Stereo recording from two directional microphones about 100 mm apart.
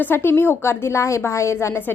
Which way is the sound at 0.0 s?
20° left (ahead or behind).